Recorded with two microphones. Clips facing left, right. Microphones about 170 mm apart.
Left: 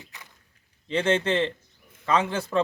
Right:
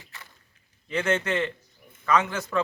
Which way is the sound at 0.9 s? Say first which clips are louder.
Left 2 dB; 30° left (ahead or behind).